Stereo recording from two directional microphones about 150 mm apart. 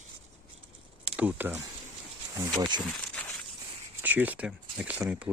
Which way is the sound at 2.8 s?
5° left (ahead or behind).